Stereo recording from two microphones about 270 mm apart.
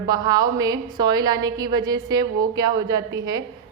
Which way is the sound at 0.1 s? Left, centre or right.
Centre.